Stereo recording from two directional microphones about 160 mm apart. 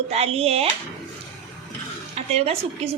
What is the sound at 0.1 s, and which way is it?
Speech, 40° right (ahead or behind).